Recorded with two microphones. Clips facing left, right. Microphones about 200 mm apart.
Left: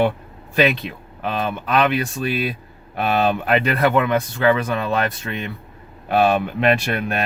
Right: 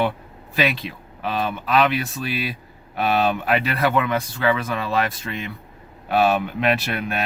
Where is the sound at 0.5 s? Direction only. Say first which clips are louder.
Left 4 dB; 50° left (ahead or behind).